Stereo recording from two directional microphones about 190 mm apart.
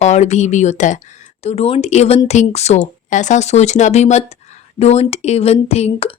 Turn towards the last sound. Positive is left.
turn(degrees=35)  # may be behind; listen again after turning